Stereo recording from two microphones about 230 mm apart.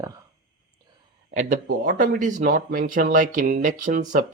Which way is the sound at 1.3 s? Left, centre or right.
Right.